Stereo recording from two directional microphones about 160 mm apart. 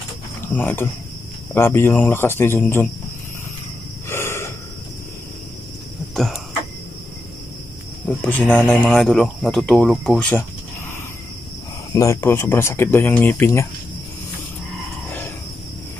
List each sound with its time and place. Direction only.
0.6 s speech: 10° left (ahead or behind)
4.1 s snort: 15° left (ahead or behind)
6.1 s cough: centre (ahead or behind)
8.2 s speech: 10° left (ahead or behind)
11.9 s speech: 20° left (ahead or behind)